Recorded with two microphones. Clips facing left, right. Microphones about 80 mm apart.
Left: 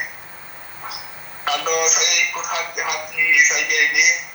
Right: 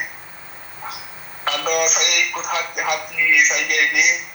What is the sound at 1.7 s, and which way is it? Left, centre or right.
Speech, right.